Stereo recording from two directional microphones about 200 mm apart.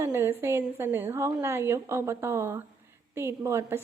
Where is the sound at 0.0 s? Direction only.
10° right (ahead or behind).